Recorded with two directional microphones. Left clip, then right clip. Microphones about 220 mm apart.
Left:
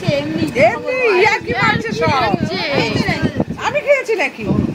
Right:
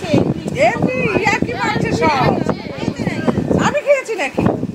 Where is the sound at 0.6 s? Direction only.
5° right (ahead or behind).